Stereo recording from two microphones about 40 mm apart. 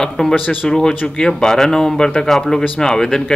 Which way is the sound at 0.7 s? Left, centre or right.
Centre.